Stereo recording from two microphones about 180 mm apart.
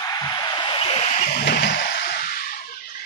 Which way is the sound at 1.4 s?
65° left (ahead or behind).